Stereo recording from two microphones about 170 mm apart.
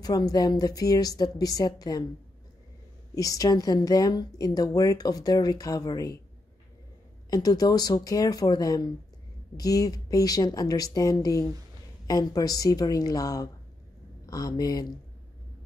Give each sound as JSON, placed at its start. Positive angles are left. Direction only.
{"t": 0.0, "sound": "a woman's voice", "side_deg": 20}
{"t": 3.2, "sound": "a woman's voice", "side_deg": 20}
{"t": 7.2, "sound": "a woman's voice", "side_deg": 20}